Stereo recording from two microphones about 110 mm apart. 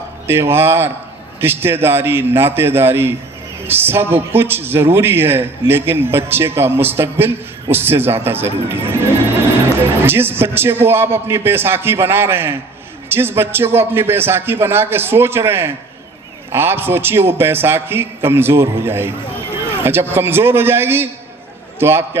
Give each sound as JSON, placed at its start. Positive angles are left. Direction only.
{"t": 0.3, "sound": "a man's voice", "side_deg": -20}